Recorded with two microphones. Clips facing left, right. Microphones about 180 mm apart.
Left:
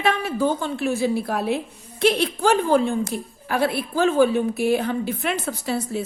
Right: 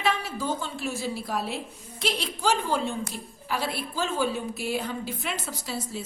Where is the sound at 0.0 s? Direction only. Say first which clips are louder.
Left 7 dB; 55° left (ahead or behind).